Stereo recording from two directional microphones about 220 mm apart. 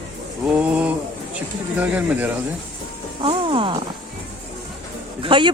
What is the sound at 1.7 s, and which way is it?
Speech, 5° right (ahead or behind).